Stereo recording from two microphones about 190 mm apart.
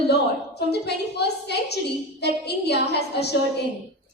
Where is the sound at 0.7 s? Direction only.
60° left (ahead or behind).